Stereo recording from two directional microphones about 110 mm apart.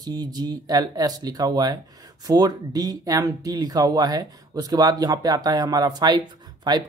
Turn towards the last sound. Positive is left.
turn(degrees=-40)  # may be behind; listen again after turning